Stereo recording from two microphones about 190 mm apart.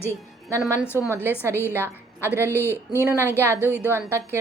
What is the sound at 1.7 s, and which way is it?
Speech, 10° right (ahead or behind).